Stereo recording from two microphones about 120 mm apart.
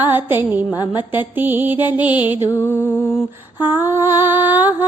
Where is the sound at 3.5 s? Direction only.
20° right (ahead or behind).